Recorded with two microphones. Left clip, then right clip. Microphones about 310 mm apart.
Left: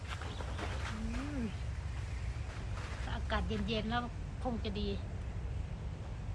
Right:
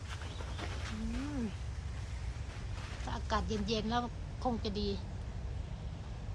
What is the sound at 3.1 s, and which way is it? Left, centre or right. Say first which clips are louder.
Speech: right 3 dB; centre.